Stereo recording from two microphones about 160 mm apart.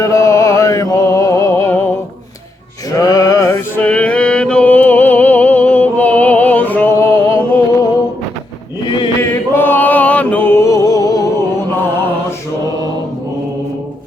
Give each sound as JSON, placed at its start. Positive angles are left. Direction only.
{"t": 0.0, "sound": "music", "side_deg": 20}
{"t": 3.0, "sound": "mantra", "side_deg": 20}
{"t": 9.2, "sound": "chant", "side_deg": 15}